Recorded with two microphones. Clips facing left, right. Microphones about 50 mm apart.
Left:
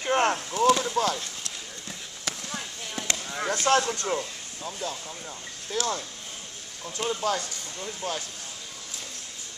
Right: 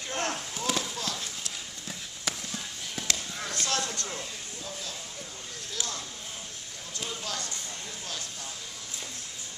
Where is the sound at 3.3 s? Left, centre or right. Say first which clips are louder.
Left 14 dB; left.